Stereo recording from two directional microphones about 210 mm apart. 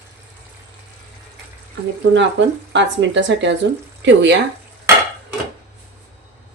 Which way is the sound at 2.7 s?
60° right (ahead or behind).